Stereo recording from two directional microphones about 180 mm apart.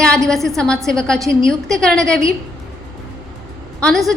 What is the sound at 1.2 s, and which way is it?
Speech, 15° right (ahead or behind).